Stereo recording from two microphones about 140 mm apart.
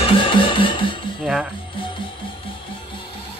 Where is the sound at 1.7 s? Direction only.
35° left (ahead or behind).